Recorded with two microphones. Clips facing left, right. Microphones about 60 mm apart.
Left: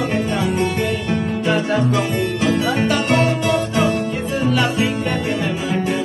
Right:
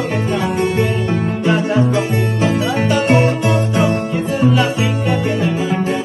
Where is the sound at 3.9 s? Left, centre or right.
Right.